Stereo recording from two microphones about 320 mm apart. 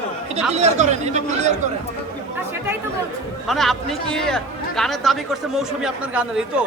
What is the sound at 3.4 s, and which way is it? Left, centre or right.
A man's voice, centre.